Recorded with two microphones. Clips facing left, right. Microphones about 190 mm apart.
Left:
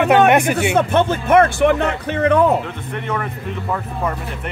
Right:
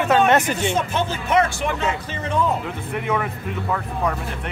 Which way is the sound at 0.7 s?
60° left (ahead or behind).